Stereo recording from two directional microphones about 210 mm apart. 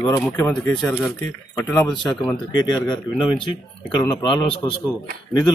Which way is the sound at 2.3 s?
20° left (ahead or behind).